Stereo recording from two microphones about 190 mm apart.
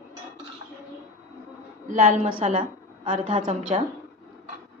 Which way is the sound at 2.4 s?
30° right (ahead or behind).